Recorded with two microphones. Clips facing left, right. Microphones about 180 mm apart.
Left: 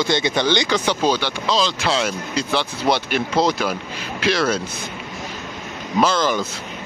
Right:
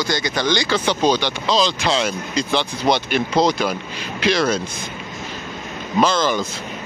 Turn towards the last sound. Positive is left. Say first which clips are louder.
# right 1 dB
turn(degrees=10)  # may be behind; listen again after turning